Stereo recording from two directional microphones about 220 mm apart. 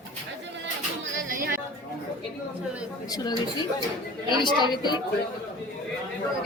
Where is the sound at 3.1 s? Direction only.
20° left (ahead or behind).